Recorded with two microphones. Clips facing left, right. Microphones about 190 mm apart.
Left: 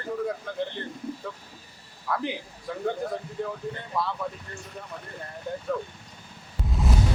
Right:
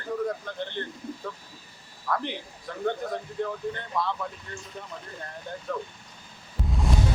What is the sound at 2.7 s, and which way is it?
Speech, centre (ahead or behind).